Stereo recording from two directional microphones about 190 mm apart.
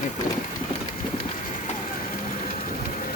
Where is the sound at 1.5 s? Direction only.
45° left (ahead or behind).